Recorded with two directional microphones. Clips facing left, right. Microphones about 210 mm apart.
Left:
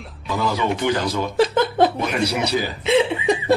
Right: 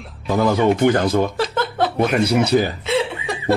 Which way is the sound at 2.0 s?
50° right (ahead or behind).